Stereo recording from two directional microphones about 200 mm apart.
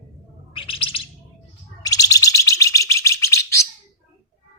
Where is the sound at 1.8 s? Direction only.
15° left (ahead or behind).